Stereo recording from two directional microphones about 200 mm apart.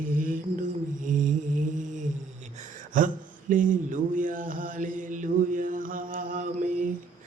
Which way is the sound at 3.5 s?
40° right (ahead or behind).